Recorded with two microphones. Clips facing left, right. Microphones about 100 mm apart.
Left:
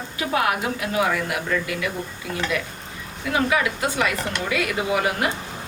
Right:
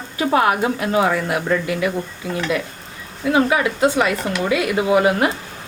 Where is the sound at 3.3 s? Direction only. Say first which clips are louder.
Right 4 dB; 25° right (ahead or behind).